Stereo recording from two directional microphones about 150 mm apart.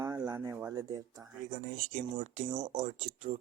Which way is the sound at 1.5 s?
55° right (ahead or behind).